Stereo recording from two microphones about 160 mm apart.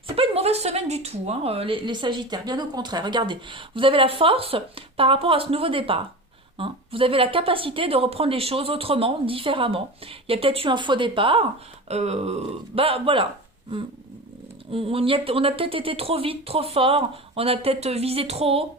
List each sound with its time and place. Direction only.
0.2 s speech: 40° right (ahead or behind)
14.7 s speech: 35° right (ahead or behind)